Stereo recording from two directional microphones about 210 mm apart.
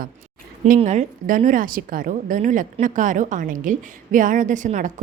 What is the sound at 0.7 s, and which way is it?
A woman's voice, 35° right (ahead or behind).